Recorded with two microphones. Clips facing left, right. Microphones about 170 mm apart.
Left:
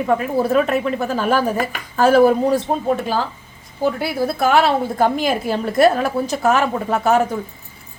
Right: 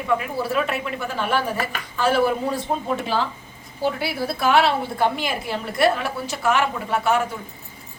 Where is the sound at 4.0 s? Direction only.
45° left (ahead or behind).